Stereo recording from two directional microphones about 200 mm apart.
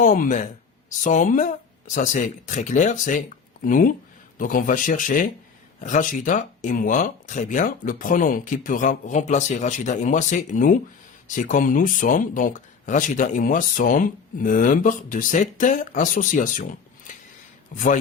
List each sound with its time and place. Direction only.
0.0 s speech: 40° left (ahead or behind)